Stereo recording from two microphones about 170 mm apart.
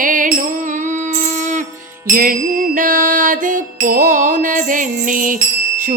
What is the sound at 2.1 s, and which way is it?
Music, 55° right (ahead or behind).